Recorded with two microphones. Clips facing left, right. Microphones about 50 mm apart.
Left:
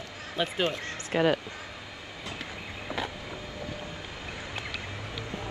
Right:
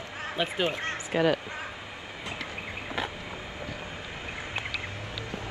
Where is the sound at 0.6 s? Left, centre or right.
Right.